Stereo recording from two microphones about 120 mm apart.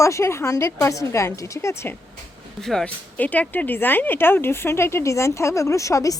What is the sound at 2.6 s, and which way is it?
Speech, 5° left (ahead or behind).